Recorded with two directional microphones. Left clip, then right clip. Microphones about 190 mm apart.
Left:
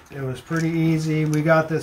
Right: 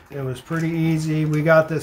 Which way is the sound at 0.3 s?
40° right (ahead or behind).